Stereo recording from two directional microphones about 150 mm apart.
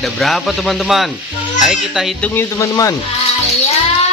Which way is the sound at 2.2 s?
15° left (ahead or behind).